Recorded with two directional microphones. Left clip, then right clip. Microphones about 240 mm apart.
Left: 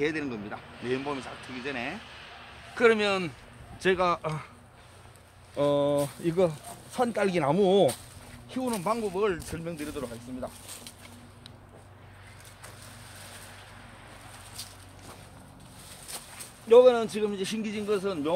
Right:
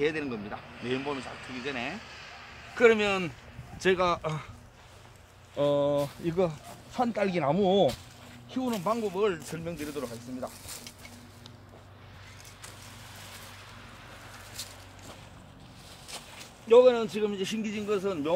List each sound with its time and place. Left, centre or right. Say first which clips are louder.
0.0 s speech: even; centre
1.0 s speech: even; centre
1.7 s speech: left 1 dB; centre
2.0 s a sound: even; centre
2.7 s speech: even; centre
5.6 s speech: left 1 dB; centre
6.2 s speech: left 3 dB; left
8.5 s speech: left 1 dB; centre
16.1 s a man's voice: right 1 dB; centre